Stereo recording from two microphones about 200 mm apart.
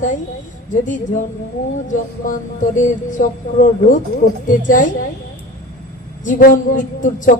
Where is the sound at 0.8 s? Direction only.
40° left (ahead or behind).